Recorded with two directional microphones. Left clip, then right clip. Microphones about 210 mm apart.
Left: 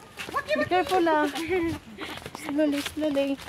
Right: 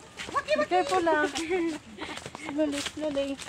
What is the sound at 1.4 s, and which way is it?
Speech, 25° left (ahead or behind).